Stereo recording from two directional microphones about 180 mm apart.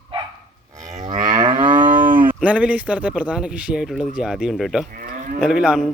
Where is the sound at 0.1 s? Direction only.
30° right (ahead or behind).